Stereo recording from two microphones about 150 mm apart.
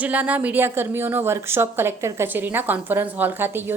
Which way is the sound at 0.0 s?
10° right (ahead or behind).